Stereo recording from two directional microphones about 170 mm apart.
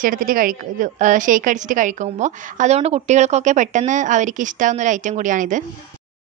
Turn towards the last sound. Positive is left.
turn(degrees=-50)  # may be behind; listen again after turning